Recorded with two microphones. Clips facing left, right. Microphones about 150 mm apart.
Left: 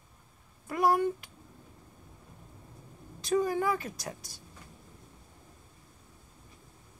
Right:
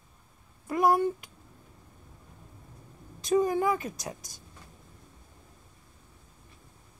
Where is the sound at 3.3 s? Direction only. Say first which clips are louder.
Right 3 dB; 15° right (ahead or behind).